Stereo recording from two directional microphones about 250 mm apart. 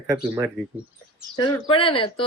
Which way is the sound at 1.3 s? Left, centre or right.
Centre.